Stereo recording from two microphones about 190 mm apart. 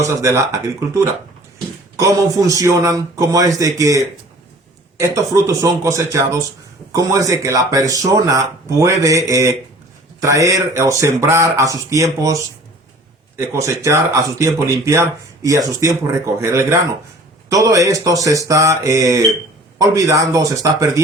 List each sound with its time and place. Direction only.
0.0 s speech: 15° right (ahead or behind)